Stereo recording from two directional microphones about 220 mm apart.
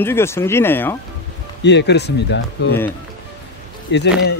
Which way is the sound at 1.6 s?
50° left (ahead or behind).